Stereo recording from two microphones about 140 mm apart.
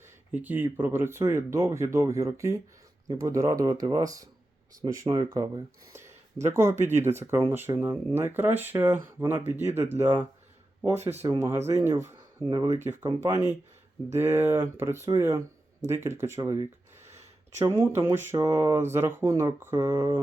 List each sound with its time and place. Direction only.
0.3 s speech: 10° right (ahead or behind)
10.9 s speech: 50° right (ahead or behind)
11.3 s speech: 20° right (ahead or behind)